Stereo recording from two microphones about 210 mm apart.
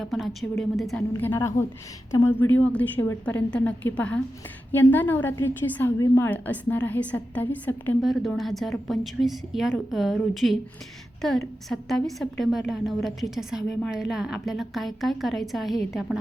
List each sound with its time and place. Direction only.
0.0 s a woman's voice: centre (ahead or behind)